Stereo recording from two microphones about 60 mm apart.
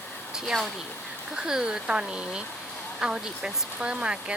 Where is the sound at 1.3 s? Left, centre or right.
Centre.